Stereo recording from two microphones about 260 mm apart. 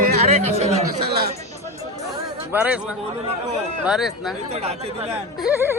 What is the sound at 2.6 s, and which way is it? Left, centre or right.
Speech, centre.